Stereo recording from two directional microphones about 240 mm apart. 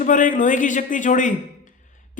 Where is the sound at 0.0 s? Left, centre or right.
Left.